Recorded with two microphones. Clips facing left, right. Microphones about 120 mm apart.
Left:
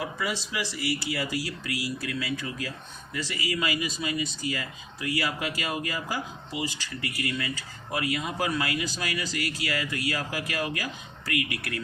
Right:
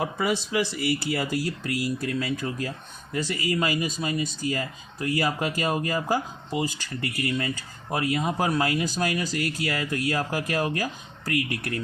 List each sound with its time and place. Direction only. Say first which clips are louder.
0.0 s speech: right 5 dB; 50° right (ahead or behind)